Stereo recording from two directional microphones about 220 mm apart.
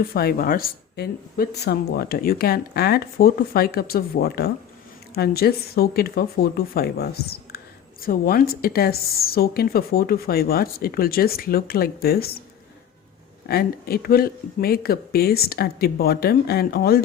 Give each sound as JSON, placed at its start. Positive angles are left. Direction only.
{"t": 0.1, "sound": "speech", "side_deg": 45}
{"t": 13.5, "sound": "speech", "side_deg": 45}